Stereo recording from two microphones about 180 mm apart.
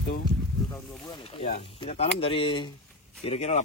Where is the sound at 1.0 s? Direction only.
25° left (ahead or behind).